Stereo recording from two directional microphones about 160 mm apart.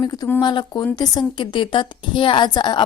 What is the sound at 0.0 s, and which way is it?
A woman's voice, 25° left (ahead or behind).